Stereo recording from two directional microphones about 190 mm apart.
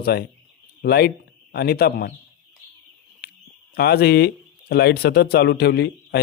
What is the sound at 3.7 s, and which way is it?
A man's voice, 55° left (ahead or behind).